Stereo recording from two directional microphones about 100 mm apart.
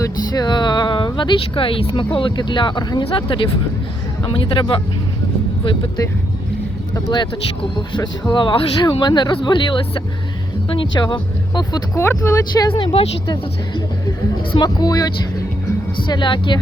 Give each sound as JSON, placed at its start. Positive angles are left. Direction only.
{"t": 0.0, "sound": "a sound", "side_deg": 40}
{"t": 2.1, "sound": "speech", "side_deg": 55}
{"t": 6.9, "sound": "speech", "side_deg": 50}
{"t": 8.3, "sound": "speech", "side_deg": 50}
{"t": 11.9, "sound": "speech", "side_deg": 30}
{"t": 12.7, "sound": "speech", "side_deg": 70}
{"t": 13.2, "sound": "speech", "side_deg": 50}
{"t": 16.0, "sound": "speech", "side_deg": 50}